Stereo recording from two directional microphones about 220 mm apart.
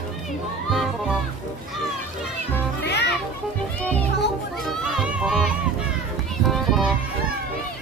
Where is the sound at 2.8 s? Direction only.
50° left (ahead or behind).